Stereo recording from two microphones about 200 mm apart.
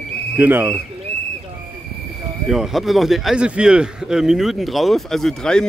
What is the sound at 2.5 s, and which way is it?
A man's voice, centre (ahead or behind).